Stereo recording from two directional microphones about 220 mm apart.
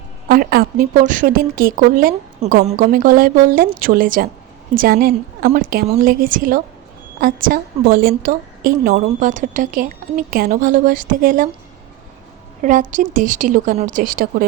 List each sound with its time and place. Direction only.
0.3 s a woman's voice: 40° right (ahead or behind)
12.6 s a woman's voice: 35° right (ahead or behind)